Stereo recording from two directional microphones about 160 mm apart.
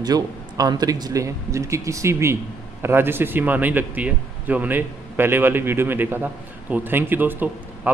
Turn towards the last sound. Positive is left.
turn(degrees=-10)  # may be behind; listen again after turning